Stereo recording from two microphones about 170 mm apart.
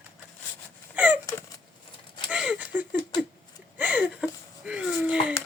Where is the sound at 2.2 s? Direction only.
5° right (ahead or behind).